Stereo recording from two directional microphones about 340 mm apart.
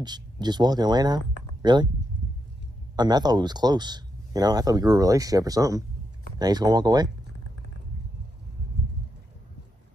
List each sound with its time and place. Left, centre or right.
0.0 s speech: centre
3.0 s speech: centre